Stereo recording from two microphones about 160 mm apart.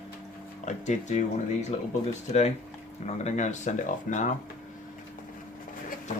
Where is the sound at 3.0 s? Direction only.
45° left (ahead or behind).